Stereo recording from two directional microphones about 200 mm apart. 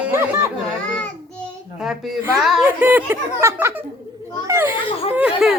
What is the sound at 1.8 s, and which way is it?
A woman's voice, 5° right (ahead or behind).